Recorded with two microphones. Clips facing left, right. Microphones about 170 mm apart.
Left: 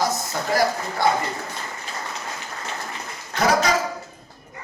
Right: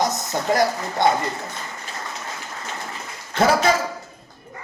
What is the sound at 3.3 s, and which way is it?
Speech, 25° right (ahead or behind).